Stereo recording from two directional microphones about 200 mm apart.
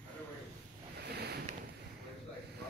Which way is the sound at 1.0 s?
55° right (ahead or behind).